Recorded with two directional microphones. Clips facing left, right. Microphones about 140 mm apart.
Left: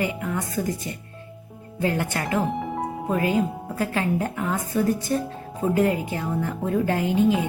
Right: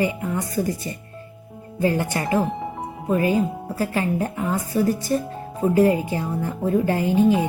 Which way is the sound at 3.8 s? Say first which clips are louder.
Right 1 dB; 5° right (ahead or behind).